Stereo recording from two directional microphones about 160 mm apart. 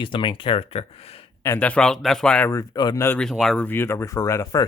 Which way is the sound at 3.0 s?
10° left (ahead or behind).